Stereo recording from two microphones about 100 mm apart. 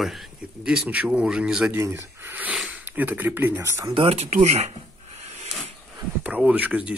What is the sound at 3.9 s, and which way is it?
Speech, 70° right (ahead or behind).